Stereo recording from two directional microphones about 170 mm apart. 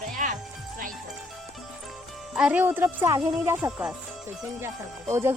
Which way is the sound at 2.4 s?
10° right (ahead or behind).